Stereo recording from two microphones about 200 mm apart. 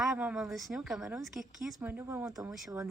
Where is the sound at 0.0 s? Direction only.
5° right (ahead or behind).